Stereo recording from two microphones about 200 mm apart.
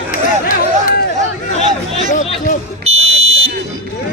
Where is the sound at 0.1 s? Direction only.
45° left (ahead or behind).